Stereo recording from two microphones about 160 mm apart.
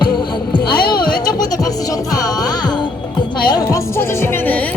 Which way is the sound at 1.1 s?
25° left (ahead or behind).